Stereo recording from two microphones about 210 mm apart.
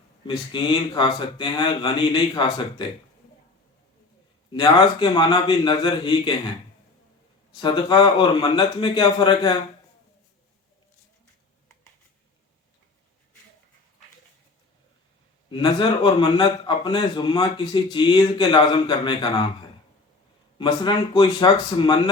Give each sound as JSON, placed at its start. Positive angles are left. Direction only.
{"t": 0.3, "sound": "a man's voice", "side_deg": 20}
{"t": 4.5, "sound": "a man's voice", "side_deg": 20}
{"t": 7.6, "sound": "a man's voice", "side_deg": 20}
{"t": 15.4, "sound": "a man's voice", "side_deg": 25}
{"t": 20.6, "sound": "a man's voice", "side_deg": 20}